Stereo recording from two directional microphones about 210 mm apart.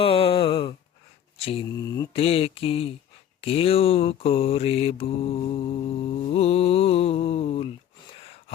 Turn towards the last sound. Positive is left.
turn(degrees=30)  # may be behind; listen again after turning